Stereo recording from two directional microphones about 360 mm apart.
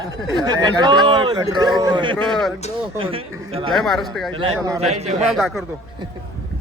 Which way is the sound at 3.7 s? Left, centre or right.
Centre.